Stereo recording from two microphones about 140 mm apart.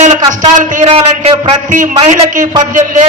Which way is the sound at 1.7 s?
65° right (ahead or behind).